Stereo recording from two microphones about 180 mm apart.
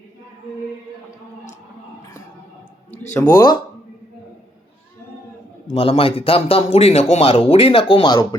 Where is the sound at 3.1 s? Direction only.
10° left (ahead or behind).